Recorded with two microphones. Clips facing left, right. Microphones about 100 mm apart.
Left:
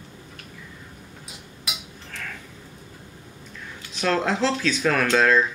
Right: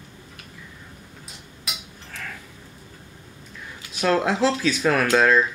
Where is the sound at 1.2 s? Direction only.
Centre (ahead or behind).